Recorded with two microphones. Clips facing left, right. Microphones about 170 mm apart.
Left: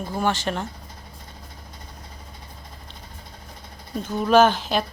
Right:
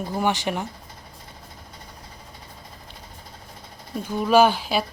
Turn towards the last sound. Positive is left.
turn(degrees=-10)  # may be behind; listen again after turning